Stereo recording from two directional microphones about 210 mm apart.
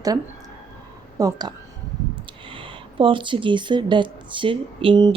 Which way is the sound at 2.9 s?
25° right (ahead or behind).